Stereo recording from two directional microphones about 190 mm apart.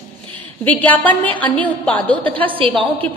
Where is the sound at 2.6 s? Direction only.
30° right (ahead or behind).